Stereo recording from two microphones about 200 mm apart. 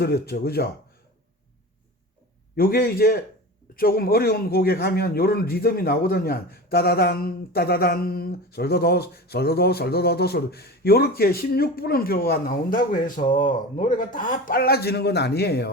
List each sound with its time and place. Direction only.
0.0 s a man's voice: 50° left (ahead or behind)
2.6 s a man's voice: 50° left (ahead or behind)